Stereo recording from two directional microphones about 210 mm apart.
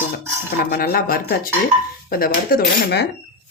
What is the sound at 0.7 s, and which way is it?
Speech, 45° left (ahead or behind).